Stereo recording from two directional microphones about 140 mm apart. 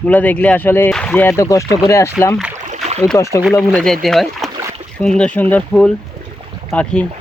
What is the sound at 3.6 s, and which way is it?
Speech, centre (ahead or behind).